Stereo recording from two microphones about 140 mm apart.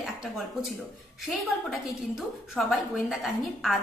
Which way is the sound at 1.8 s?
Centre (ahead or behind).